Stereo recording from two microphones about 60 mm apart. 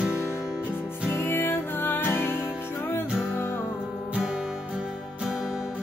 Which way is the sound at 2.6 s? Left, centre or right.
Left.